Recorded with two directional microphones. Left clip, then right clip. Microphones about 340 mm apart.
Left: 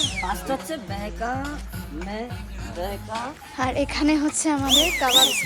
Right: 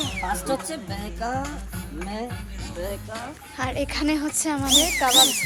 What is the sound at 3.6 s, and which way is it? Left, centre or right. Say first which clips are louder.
A woman's voice: left 3 dB; centre.